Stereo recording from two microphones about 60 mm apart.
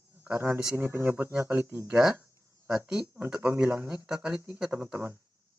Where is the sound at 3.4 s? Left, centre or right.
Right.